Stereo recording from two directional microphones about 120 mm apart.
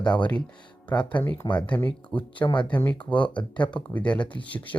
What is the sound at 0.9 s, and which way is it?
Speech, 10° left (ahead or behind).